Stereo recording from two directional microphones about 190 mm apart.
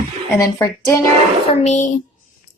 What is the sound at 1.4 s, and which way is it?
Speech, 40° left (ahead or behind).